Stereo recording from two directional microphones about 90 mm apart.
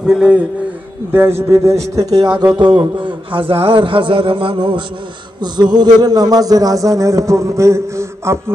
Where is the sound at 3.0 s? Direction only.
80° right.